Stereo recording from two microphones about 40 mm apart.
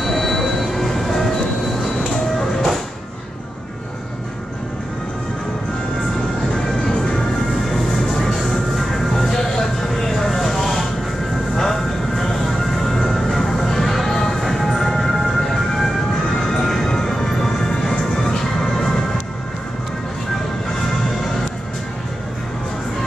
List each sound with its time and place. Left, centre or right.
0.0 s train: centre
2.3 s music: centre
6.6 s music: centre
7.5 s music: centre